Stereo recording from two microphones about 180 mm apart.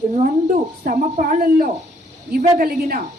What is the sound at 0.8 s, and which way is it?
A woman's voice, 45° right (ahead or behind).